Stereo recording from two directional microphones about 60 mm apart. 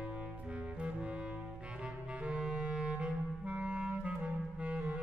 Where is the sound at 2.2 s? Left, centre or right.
Centre.